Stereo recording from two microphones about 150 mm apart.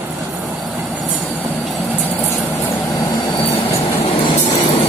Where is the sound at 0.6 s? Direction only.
10° right (ahead or behind).